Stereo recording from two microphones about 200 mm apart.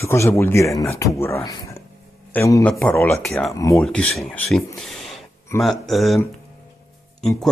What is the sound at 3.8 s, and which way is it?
Speech, 5° left (ahead or behind).